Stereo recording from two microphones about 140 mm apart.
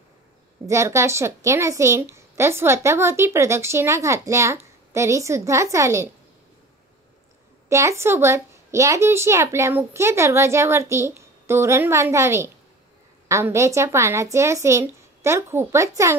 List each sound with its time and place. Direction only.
0.7 s a woman's voice: 20° right (ahead or behind)
7.7 s a woman's voice: 20° right (ahead or behind)